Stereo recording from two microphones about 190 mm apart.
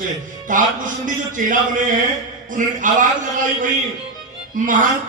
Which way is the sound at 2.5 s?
45° right (ahead or behind).